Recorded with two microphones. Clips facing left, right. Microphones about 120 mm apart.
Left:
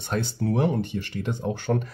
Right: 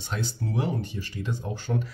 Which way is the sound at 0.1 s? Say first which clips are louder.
Left 5 dB; 55° left (ahead or behind).